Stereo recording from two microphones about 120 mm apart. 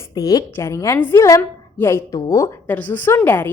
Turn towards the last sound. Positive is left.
turn(degrees=20)  # may be behind; listen again after turning